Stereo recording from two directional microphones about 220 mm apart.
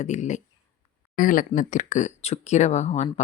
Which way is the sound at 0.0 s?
35° left (ahead or behind).